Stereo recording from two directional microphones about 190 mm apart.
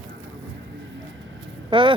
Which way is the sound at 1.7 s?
25° right (ahead or behind).